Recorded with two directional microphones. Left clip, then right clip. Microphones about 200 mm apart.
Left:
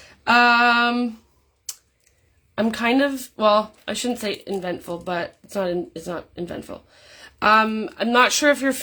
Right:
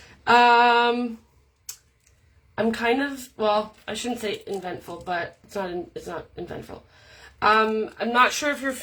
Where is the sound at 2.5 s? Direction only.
50° left (ahead or behind).